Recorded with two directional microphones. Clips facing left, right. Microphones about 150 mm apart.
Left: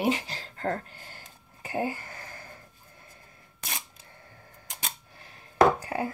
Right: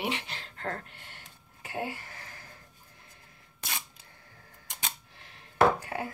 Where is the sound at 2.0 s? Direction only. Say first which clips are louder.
Left 4 dB; 45° left (ahead or behind).